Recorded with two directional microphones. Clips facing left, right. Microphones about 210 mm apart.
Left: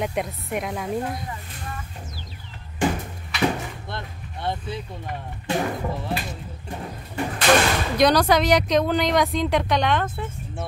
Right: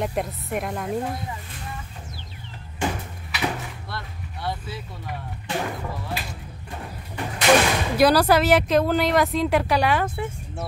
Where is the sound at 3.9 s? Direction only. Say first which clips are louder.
Left 1 dB; 20° left (ahead or behind).